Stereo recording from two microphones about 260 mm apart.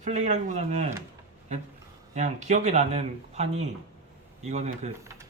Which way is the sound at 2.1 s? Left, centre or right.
Right.